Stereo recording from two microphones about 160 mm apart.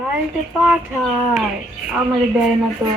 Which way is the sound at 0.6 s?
5° right (ahead or behind).